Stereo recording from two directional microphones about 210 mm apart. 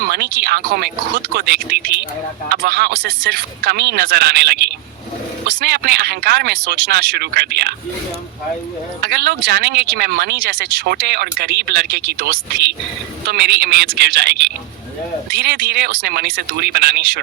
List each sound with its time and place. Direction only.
0.1 s speech: 50° right (ahead or behind)
9.0 s speech: 50° right (ahead or behind)